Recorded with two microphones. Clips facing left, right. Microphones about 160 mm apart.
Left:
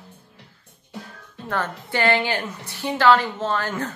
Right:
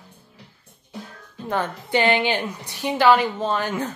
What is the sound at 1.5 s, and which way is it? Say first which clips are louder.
A woman's voice: right 3 dB; 15° right (ahead or behind).